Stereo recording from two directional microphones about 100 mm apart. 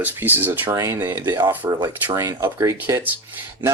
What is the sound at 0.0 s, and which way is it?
Speech, 20° right (ahead or behind).